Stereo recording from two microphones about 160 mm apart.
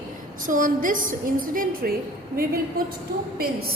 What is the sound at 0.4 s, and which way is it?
A woman's voice, 55° right (ahead or behind).